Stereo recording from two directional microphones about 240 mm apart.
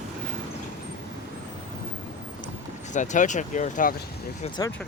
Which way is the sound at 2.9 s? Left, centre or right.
Left.